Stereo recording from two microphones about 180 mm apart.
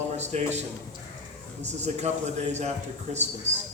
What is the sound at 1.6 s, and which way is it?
A man's voice, 40° right (ahead or behind).